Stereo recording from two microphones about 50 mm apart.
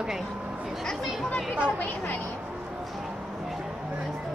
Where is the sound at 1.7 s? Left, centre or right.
Left.